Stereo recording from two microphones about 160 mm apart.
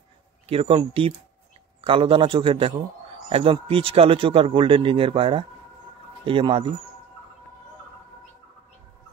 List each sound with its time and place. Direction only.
0.5 s speech: 35° right (ahead or behind)